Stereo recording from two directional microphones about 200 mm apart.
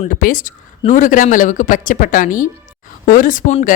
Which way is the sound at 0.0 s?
40° left (ahead or behind).